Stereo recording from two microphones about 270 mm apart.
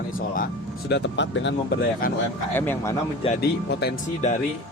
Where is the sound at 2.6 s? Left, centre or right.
Centre.